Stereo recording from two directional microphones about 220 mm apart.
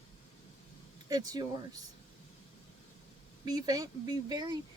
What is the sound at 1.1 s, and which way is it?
Speech, 15° right (ahead or behind).